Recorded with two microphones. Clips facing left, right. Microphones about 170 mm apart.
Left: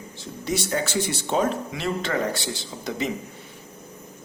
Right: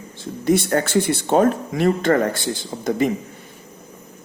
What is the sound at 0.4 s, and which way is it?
A man's voice, 55° right (ahead or behind).